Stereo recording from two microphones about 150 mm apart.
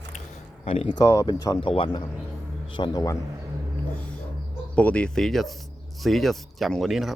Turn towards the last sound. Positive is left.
turn(degrees=0)  # may be behind; listen again after turning